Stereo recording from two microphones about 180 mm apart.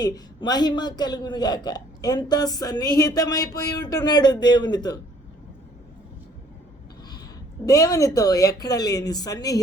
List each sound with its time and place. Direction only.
0.0 s a man's voice: 20° left (ahead or behind)
7.6 s a man's voice: 20° left (ahead or behind)